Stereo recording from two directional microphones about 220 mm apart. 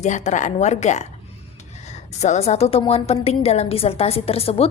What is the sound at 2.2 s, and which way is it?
A woman's voice, 30° left (ahead or behind).